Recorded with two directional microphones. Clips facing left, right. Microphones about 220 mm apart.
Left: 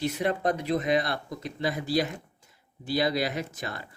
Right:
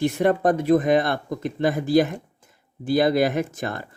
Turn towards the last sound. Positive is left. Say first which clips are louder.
# right 8 dB
turn(degrees=-50)  # may be behind; listen again after turning